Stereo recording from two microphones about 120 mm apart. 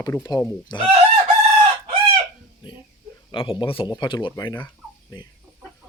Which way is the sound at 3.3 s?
45° left (ahead or behind).